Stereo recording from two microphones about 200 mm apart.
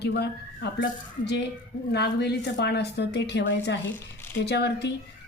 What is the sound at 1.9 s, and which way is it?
Speech, 55° left (ahead or behind).